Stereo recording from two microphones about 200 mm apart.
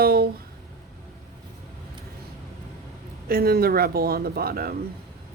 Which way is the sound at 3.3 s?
50° right (ahead or behind).